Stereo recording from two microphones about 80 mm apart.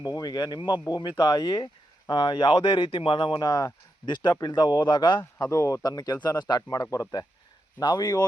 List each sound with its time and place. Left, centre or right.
0.0 s speech: left
5.4 s speech: left